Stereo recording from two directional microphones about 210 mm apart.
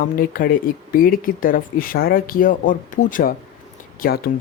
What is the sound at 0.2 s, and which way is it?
Speech, 45° left (ahead or behind).